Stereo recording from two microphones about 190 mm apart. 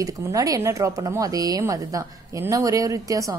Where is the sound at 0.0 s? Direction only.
15° right (ahead or behind).